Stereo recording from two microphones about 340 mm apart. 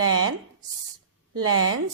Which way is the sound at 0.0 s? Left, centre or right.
Right.